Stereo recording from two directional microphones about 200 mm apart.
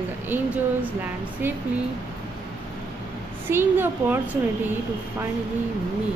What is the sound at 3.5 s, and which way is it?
Speech, 10° right (ahead or behind).